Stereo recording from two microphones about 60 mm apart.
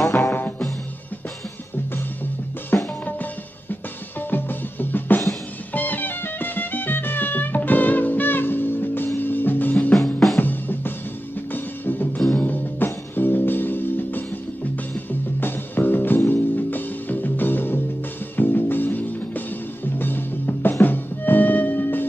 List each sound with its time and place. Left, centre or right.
0.1 s music: left
2.7 s music: left
4.3 s drum: left
5.7 s music: left
15.4 s music: left